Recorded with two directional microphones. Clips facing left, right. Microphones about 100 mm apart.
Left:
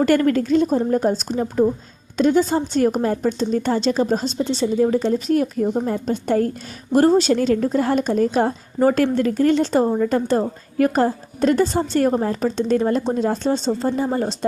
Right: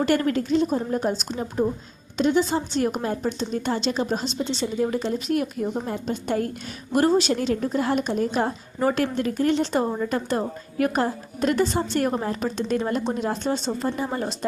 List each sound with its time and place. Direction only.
0.0 s a woman's voice: 50° left (ahead or behind); by 14.3 s 30° left (ahead or behind)